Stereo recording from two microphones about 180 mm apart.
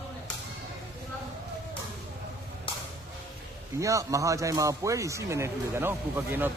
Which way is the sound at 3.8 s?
20° right (ahead or behind).